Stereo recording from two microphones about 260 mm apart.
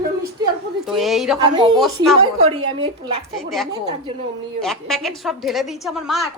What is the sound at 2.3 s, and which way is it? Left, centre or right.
Speech, right.